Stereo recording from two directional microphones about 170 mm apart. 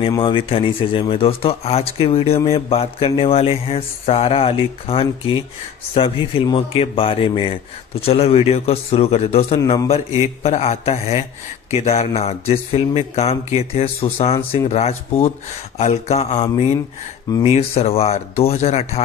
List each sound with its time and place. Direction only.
0.2 s speech: 30° left (ahead or behind)